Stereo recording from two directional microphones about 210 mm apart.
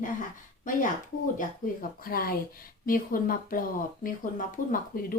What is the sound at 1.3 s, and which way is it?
Speech, 40° left (ahead or behind).